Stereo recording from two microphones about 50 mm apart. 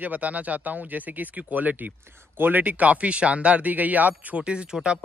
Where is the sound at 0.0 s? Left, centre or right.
Right.